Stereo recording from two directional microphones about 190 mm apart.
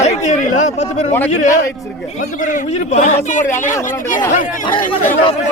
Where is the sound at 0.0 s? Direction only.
35° left (ahead or behind).